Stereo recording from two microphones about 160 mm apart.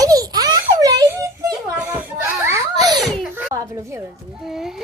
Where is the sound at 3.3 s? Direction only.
15° right (ahead or behind).